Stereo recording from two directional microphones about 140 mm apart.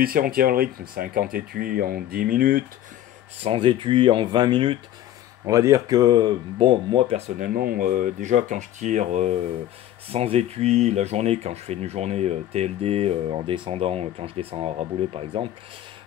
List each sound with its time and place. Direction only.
0.0 s speech: 90° right
3.4 s speech: 40° right (ahead or behind)
5.5 s speech: 20° right (ahead or behind); by 7.2 s 40° right (ahead or behind)
7.3 s speech: 85° right; by 15.5 s 40° right (ahead or behind)